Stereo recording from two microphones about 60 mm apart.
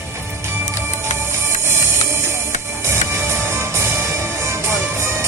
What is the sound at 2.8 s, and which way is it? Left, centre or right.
Music, right.